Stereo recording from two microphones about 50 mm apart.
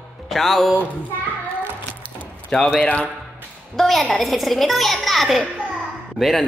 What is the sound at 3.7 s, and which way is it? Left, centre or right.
A woman's voice, centre.